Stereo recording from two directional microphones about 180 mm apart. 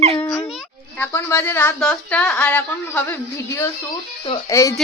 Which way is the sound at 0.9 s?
15° left (ahead or behind).